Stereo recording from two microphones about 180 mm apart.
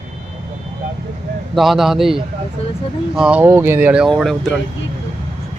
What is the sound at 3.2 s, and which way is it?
Speech, 5° right (ahead or behind).